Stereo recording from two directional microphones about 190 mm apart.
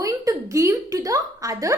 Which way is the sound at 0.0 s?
15° right (ahead or behind).